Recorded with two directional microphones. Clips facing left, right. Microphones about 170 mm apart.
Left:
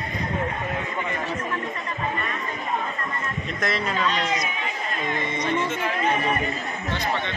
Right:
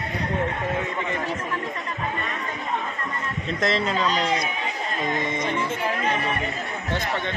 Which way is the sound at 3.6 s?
25° right (ahead or behind).